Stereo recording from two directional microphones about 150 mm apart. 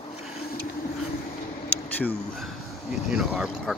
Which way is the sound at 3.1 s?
5° right (ahead or behind).